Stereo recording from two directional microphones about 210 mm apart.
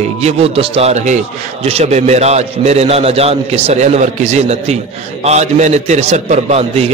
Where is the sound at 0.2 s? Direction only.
30° right (ahead or behind).